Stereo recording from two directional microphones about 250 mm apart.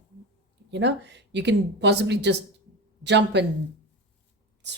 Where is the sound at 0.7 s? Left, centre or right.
Right.